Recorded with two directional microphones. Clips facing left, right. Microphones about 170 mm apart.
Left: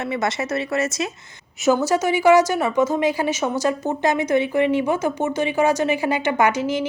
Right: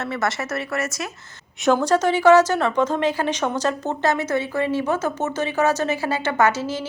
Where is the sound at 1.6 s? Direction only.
5° left (ahead or behind).